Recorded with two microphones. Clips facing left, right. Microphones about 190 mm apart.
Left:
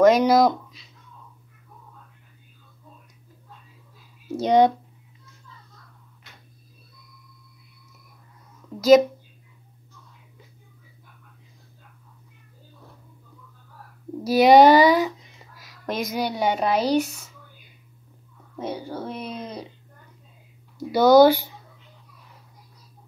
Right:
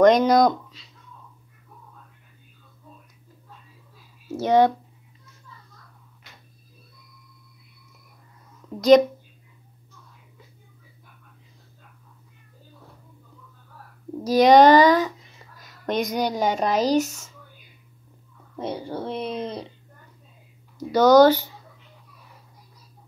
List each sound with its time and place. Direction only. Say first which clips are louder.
0.0 s speech: even; 5° left (ahead or behind)
0.5 s a sound: even; 10° left (ahead or behind)
4.3 s speech: left 1 dB; 15° left (ahead or behind)
14.2 s speech: even; 10° left (ahead or behind)
15.6 s a sound: right 3 dB; centre (ahead or behind)
16.3 s speech: even; 40° right (ahead or behind)
18.6 s speech: right 1 dB; 30° right (ahead or behind)
20.9 s speech: even; 10° left (ahead or behind)